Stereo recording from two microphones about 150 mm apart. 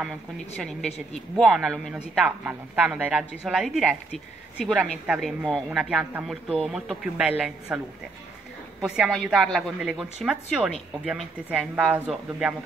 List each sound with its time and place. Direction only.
0.6 s speech: centre (ahead or behind)
8.8 s speech: 5° right (ahead or behind)